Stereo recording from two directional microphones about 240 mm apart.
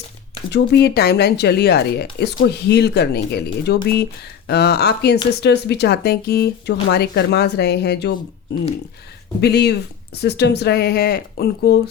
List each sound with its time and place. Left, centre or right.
0.5 s speech: left
9.4 s speech: left